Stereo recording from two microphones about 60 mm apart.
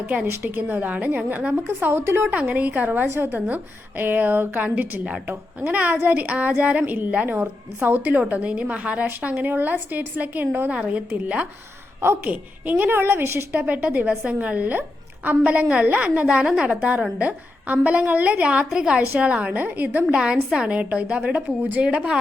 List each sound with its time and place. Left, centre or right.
0.5 s a woman's voice: right
1.8 s speech: right
2.3 s a woman's voice: right
10.7 s a woman's voice: right
18.7 s a woman's voice: centre
19.1 s a woman's voice: right
20.1 s a woman's voice: centre